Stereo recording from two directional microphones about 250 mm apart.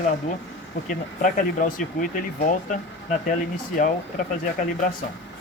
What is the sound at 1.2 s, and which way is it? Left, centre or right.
Speech, left.